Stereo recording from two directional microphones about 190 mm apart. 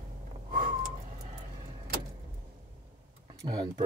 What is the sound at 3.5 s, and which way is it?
Speech, 25° right (ahead or behind).